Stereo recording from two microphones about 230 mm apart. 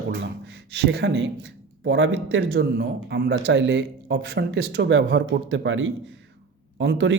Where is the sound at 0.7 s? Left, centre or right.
Right.